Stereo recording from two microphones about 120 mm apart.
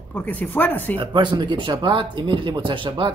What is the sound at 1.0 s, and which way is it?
Speech, 40° right (ahead or behind).